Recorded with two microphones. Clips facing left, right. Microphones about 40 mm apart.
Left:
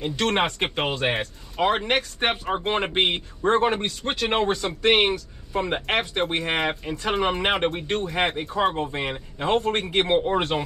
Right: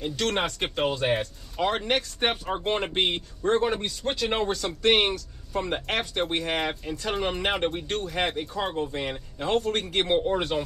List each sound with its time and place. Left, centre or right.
0.0 s speech: left
1.6 s speech: left
8.7 s speech: left